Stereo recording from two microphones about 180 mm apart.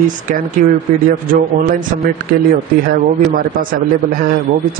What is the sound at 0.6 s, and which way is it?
Speech, 50° right (ahead or behind).